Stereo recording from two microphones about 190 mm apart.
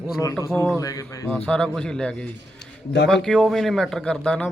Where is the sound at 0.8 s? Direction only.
20° left (ahead or behind).